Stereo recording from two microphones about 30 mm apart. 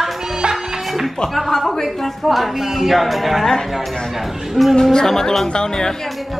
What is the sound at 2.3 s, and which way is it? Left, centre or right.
Music, centre.